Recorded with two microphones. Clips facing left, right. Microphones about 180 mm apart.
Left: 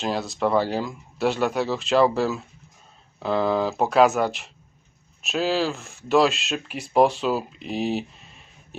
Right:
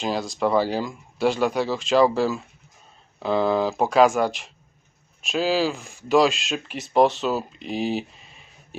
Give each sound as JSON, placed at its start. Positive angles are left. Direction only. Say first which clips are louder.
{"t": 0.0, "sound": "speech", "louder": "even", "side_deg": 0}